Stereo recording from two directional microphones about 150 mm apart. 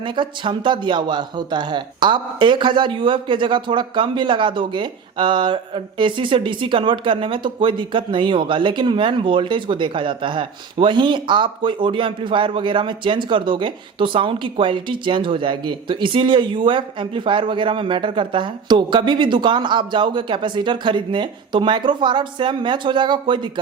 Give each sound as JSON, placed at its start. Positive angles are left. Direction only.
{"t": 0.0, "sound": "speech", "side_deg": -35}